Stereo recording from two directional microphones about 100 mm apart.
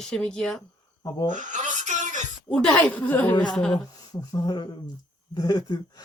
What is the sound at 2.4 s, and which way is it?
Speech, 10° left (ahead or behind).